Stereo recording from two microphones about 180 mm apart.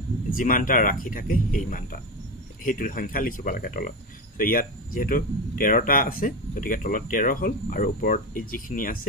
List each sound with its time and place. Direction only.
0.3 s speech: 50° left (ahead or behind)